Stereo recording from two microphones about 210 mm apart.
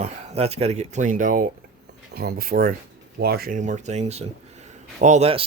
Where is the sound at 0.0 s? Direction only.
30° right (ahead or behind).